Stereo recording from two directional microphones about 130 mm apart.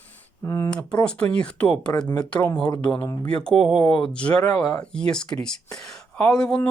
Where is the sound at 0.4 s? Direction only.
20° left (ahead or behind).